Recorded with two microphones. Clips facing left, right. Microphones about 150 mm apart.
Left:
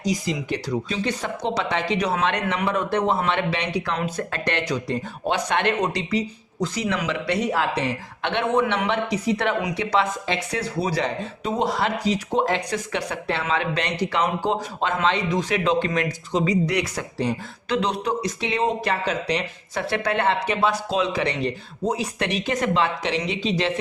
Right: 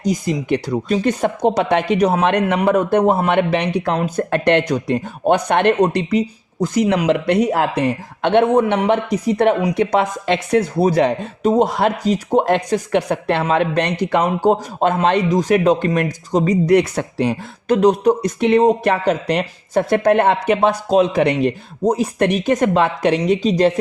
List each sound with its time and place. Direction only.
0.0 s speech: 55° right (ahead or behind)
17.7 s speech: 45° right (ahead or behind)